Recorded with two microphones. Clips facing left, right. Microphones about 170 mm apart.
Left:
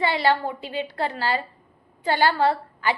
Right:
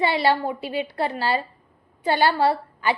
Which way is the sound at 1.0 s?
20° right (ahead or behind).